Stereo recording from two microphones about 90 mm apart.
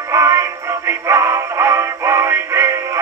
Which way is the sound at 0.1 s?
30° right (ahead or behind).